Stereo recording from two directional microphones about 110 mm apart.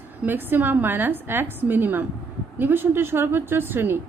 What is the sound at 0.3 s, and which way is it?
A woman's voice, 20° right (ahead or behind).